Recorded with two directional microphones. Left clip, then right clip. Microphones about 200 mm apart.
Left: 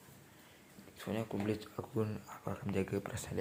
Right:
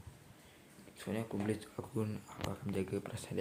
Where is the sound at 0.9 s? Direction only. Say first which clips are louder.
Left 1 dB; 5° right (ahead or behind).